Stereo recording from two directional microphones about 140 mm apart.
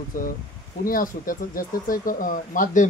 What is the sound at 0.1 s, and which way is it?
Speech, 80° left.